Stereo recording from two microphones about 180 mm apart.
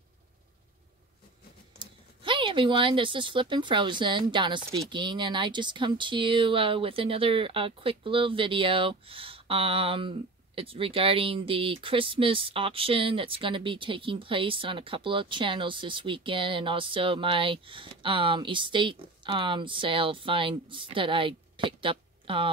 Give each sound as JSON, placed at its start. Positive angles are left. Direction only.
{"t": 1.8, "sound": "speech", "side_deg": -30}